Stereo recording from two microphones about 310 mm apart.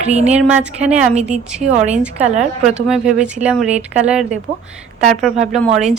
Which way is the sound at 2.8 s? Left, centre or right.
Centre.